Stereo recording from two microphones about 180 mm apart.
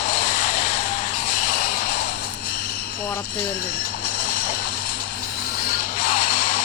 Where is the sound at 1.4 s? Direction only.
60° left (ahead or behind).